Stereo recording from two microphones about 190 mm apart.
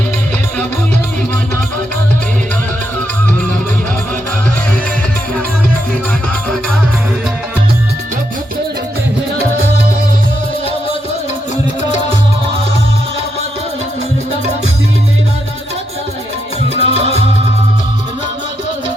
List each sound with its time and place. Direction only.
16.8 s music: 30° right (ahead or behind)